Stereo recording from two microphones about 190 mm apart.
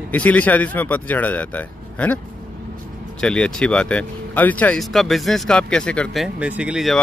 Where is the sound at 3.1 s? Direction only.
5° left (ahead or behind).